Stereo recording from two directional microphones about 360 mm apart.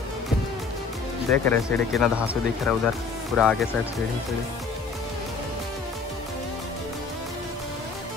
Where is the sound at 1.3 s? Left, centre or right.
Centre.